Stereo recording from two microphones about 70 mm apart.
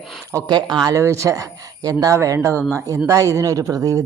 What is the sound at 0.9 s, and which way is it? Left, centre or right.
Speech, right.